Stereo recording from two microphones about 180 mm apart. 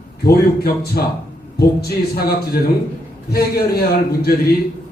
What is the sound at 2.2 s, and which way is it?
Speech, 60° left (ahead or behind).